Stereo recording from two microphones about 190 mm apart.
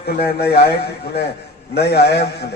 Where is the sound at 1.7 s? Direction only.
60° left (ahead or behind).